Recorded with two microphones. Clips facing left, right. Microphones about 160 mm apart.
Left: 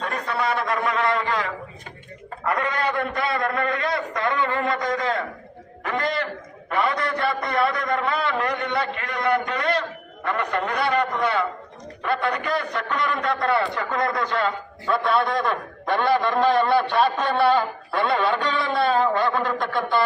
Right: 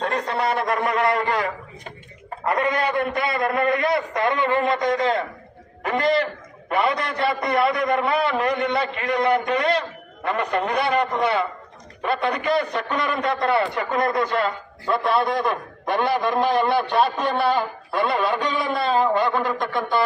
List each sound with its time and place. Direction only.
0.0 s a man's voice: 35° right (ahead or behind)
0.9 s a man's voice: 55° right (ahead or behind)
2.4 s a man's voice: 25° right (ahead or behind)